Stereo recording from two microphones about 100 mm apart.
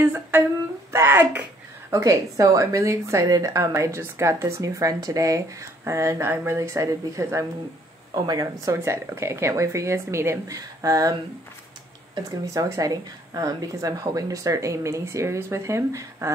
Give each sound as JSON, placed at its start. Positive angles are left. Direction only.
{"t": 0.0, "sound": "a woman's voice", "side_deg": -25}
{"t": 8.1, "sound": "a woman's voice", "side_deg": -40}
{"t": 8.7, "sound": "speech", "side_deg": -25}
{"t": 10.5, "sound": "a woman's voice", "side_deg": -35}
{"t": 12.2, "sound": "a woman's voice", "side_deg": -35}